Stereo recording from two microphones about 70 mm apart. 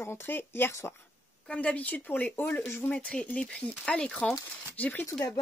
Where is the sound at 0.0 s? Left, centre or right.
Left.